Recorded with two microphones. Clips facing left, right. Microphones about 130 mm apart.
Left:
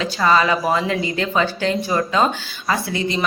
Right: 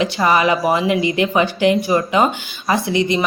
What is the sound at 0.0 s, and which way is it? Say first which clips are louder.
Speech: right 2 dB; 15° right (ahead or behind).